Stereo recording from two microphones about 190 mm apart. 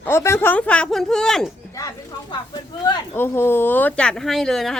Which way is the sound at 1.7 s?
15° left (ahead or behind).